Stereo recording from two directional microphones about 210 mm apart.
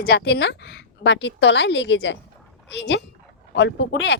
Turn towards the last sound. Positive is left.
turn(degrees=55)  # may be behind; listen again after turning